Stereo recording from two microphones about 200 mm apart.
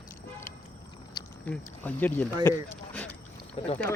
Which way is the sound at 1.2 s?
20° left (ahead or behind).